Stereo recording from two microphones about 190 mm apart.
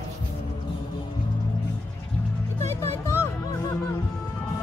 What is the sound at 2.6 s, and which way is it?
Music, 15° left (ahead or behind).